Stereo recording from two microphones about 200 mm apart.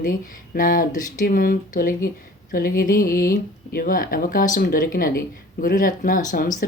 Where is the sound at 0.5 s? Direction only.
45° left (ahead or behind).